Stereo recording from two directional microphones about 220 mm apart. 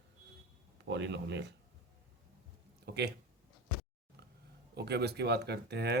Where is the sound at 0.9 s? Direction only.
50° right (ahead or behind).